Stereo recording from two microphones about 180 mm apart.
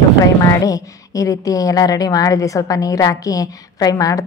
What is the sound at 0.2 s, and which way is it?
A woman's voice, 20° left (ahead or behind).